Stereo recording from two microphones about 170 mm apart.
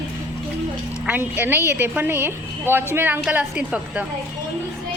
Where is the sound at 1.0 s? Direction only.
10° right (ahead or behind).